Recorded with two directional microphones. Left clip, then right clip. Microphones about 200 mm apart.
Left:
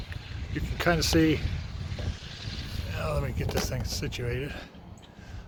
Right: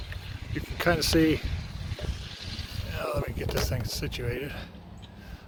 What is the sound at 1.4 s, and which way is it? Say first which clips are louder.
Vehicle: even; 55° right (ahead or behind).